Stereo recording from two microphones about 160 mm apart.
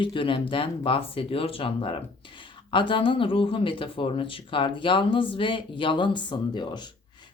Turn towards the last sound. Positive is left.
turn(degrees=30)  # may be behind; listen again after turning